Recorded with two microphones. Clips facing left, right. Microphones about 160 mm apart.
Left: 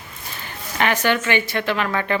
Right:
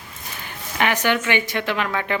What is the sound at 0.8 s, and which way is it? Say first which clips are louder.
Speech: left 1 dB; 15° right (ahead or behind).